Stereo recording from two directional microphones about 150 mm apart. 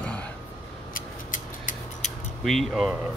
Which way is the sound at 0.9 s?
65° left (ahead or behind).